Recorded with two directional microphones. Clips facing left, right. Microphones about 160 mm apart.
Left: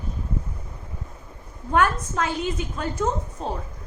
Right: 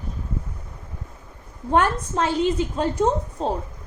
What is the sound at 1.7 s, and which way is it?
A woman's voice, 30° right (ahead or behind).